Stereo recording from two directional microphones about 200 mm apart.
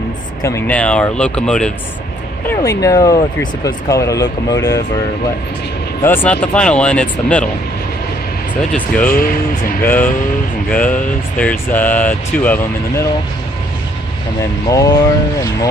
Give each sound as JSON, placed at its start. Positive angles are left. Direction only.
{"t": 0.4, "sound": "speech", "side_deg": 15}
{"t": 2.4, "sound": "speech", "side_deg": 15}
{"t": 6.0, "sound": "speech", "side_deg": 10}
{"t": 8.7, "sound": "speech", "side_deg": 5}
{"t": 9.1, "sound": "speech", "side_deg": 45}
{"t": 9.8, "sound": "speech", "side_deg": 10}
{"t": 11.3, "sound": "speech", "side_deg": 10}
{"t": 14.7, "sound": "speech", "side_deg": 15}